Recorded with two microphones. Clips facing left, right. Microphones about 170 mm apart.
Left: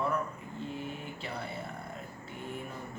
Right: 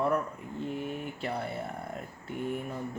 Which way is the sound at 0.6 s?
55° right (ahead or behind).